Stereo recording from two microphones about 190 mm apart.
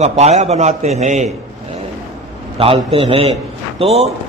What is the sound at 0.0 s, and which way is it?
A man's voice, 35° right (ahead or behind).